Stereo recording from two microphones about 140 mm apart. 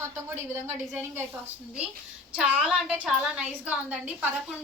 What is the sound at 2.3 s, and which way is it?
A woman's voice, 10° right (ahead or behind).